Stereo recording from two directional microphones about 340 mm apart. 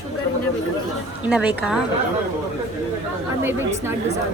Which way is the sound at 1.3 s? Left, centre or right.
Centre.